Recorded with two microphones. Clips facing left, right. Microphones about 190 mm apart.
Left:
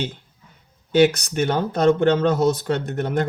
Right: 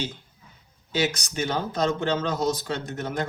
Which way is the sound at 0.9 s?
60° left (ahead or behind).